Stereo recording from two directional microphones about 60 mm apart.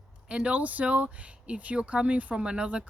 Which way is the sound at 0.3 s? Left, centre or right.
Centre.